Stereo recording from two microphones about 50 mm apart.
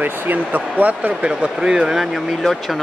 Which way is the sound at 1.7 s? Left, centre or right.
Centre.